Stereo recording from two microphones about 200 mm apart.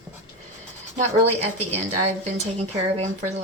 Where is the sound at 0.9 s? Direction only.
30° right (ahead or behind).